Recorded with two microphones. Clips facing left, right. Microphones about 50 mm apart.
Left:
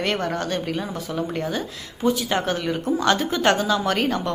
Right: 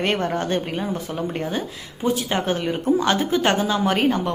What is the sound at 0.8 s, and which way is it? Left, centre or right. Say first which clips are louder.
A woman's voice: right 1 dB; centre.